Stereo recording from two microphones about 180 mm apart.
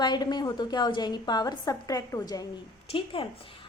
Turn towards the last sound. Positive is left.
turn(degrees=30)  # may be behind; listen again after turning